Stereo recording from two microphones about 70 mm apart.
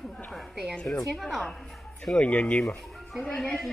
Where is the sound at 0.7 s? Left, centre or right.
Centre.